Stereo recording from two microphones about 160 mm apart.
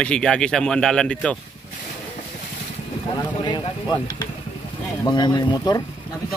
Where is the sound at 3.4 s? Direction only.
25° left (ahead or behind).